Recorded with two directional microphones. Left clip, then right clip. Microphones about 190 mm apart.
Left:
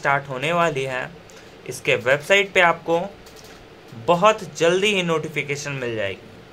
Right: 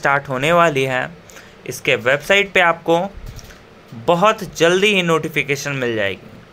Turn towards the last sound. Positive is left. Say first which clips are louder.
# right 6 dB
turn(degrees=-25)  # may be behind; listen again after turning